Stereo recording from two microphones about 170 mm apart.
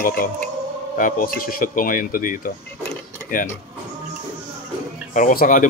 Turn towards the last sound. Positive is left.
turn(degrees=55)  # may be behind; listen again after turning